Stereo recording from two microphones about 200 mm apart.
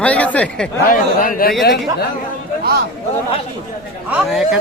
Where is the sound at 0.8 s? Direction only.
45° left (ahead or behind).